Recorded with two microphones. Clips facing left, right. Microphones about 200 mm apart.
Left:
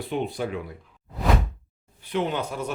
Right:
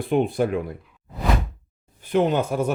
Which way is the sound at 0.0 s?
50° right (ahead or behind).